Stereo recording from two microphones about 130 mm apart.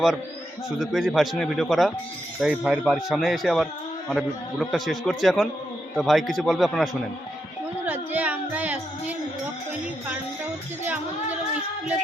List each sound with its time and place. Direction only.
0.8 s a man's voice: centre (ahead or behind)
7.9 s music: 15° right (ahead or behind)